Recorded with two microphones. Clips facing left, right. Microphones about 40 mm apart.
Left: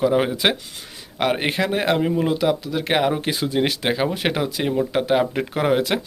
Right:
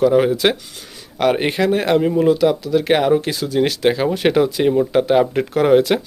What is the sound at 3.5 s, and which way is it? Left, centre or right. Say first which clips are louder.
Speech: right 6 dB; centre.